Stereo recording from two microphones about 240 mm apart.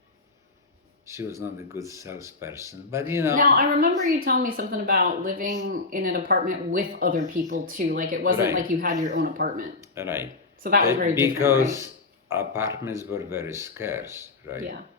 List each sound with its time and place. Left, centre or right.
1.0 s speech: centre
3.3 s a woman's voice: right
9.8 s speech: centre